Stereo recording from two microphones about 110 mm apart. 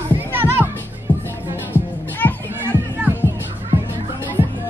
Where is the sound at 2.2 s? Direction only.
15° left (ahead or behind).